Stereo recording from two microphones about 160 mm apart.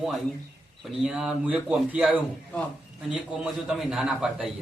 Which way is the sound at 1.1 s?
5° right (ahead or behind).